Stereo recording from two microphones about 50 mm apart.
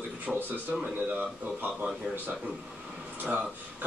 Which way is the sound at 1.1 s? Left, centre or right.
Right.